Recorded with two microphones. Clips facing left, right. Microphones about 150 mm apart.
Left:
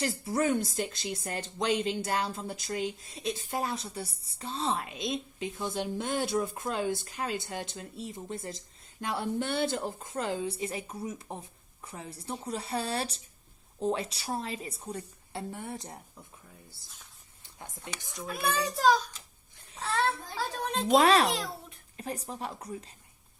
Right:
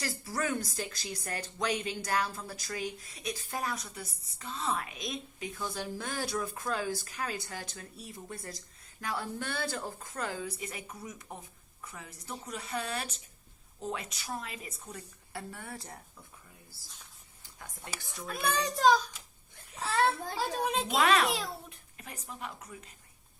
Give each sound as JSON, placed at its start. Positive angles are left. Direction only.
{"t": 0.3, "sound": "a woman's voice", "side_deg": 20}
{"t": 17.4, "sound": "a sound", "side_deg": 25}
{"t": 18.0, "sound": "a child's voice", "side_deg": 15}
{"t": 18.3, "sound": "a child's voice", "side_deg": 5}
{"t": 20.9, "sound": "a woman's voice", "side_deg": 35}
{"t": 21.2, "sound": "a child's voice", "side_deg": 0}
{"t": 21.9, "sound": "a woman's voice", "side_deg": 35}